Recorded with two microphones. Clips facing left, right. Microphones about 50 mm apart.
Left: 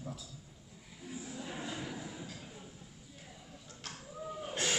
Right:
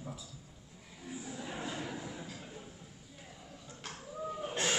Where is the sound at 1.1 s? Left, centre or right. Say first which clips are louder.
Right 1 dB; centre.